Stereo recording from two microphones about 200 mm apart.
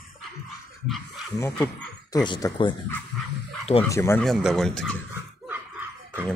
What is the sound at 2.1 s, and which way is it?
Speech, 20° left (ahead or behind).